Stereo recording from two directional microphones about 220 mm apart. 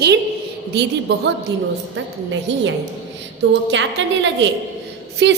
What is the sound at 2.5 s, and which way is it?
A woman's voice, 55° right (ahead or behind).